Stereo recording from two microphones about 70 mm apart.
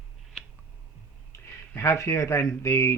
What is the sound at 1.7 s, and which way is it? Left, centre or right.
Speech, left.